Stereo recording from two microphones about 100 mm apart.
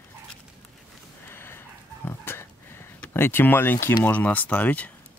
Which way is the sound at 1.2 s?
25° left (ahead or behind).